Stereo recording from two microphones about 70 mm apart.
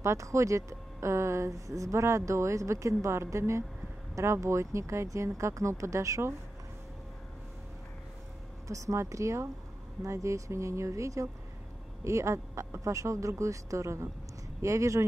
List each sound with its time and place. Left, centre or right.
0.0 s speech: right
8.6 s speech: right